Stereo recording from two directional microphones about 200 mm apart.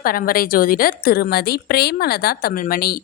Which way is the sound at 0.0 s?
45° left (ahead or behind).